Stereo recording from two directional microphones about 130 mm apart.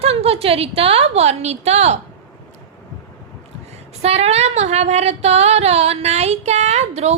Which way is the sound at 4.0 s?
55° right (ahead or behind).